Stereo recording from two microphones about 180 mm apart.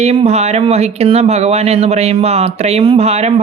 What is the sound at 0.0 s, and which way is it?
Speech, 35° right (ahead or behind).